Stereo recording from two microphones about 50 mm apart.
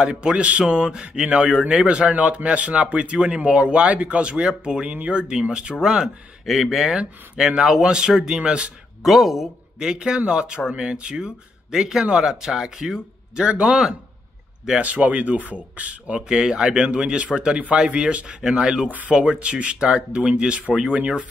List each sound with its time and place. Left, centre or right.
0.0 s speech: centre
6.4 s speech: centre; by 8.7 s right
9.0 s speech: centre
9.8 s speech: centre
13.7 s speech: centre
14.8 s speech: right
16.2 s speech: centre
18.9 s speech: right
19.1 s speech: centre